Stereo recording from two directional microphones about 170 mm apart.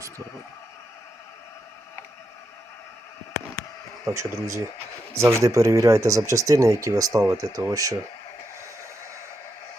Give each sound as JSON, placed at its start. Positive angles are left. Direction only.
{"t": 4.0, "sound": "speech", "side_deg": -15}